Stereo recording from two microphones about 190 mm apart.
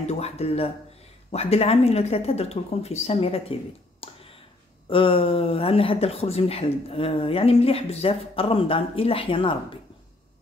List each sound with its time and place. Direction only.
0.0 s speech: 35° left (ahead or behind)
4.0 s a sound: 30° left (ahead or behind)
4.8 s speech: 30° left (ahead or behind)